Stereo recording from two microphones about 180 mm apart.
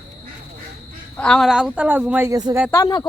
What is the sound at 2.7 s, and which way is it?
Speech, 15° left (ahead or behind).